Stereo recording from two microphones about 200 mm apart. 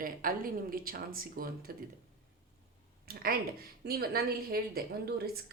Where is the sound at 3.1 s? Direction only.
45° right (ahead or behind).